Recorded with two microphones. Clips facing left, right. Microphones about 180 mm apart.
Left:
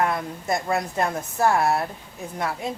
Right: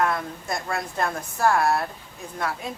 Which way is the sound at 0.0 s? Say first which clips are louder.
Left 1 dB; 20° left (ahead or behind).